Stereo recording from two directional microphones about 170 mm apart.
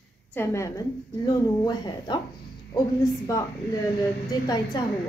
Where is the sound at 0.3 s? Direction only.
15° left (ahead or behind).